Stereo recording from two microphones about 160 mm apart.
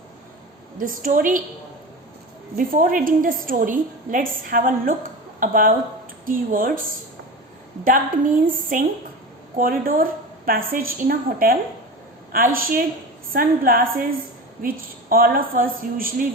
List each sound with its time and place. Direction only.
0.8 s a woman's voice: 60° right (ahead or behind)
2.6 s a woman's voice: 60° right (ahead or behind)
8.4 s a woman's voice: 55° right (ahead or behind)